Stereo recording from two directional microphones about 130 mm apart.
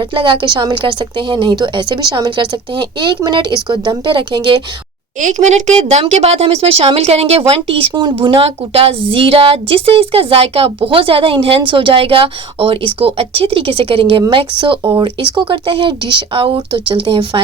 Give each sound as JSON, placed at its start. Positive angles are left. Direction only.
{"t": 0.0, "sound": "a woman's voice", "side_deg": -40}
{"t": 5.2, "sound": "a woman's voice", "side_deg": -65}